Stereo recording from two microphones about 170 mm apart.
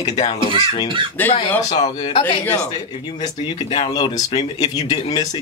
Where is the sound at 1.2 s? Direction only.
10° left (ahead or behind).